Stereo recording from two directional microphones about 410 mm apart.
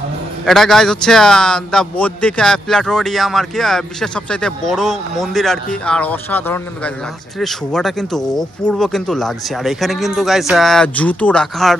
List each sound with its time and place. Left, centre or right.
0.5 s a man's voice: centre